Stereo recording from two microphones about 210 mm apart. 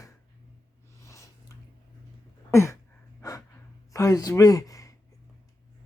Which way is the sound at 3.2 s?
15° left (ahead or behind).